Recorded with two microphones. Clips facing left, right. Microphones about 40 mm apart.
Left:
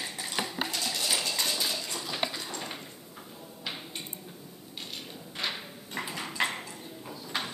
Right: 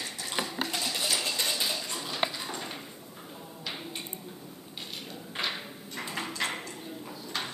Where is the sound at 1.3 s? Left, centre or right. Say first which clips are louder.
Even; centre.